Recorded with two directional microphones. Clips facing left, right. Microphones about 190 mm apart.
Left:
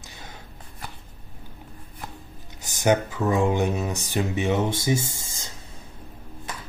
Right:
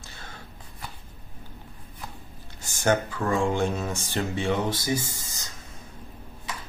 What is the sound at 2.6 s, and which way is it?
Speech, 15° left (ahead or behind).